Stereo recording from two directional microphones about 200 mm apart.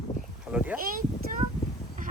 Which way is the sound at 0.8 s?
45° right (ahead or behind).